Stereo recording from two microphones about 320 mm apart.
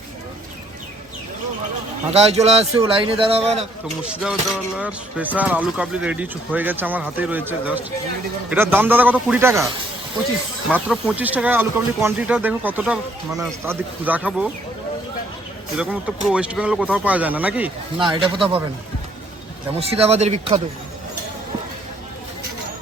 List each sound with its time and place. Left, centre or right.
2.0 s speech: centre
4.1 s a man's voice: centre
10.7 s speech: centre
15.8 s speech: centre
19.8 s speech: centre